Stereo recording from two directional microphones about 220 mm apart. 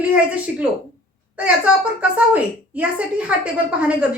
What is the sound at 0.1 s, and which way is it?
A woman's voice, 5° right (ahead or behind).